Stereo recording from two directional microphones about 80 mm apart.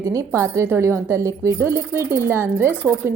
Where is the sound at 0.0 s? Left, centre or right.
Right.